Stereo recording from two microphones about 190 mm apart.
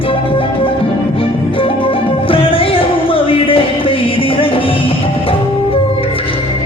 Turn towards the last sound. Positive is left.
turn(degrees=30)  # may be behind; listen again after turning